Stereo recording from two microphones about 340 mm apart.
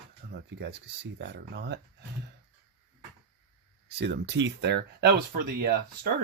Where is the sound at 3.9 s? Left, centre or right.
Right.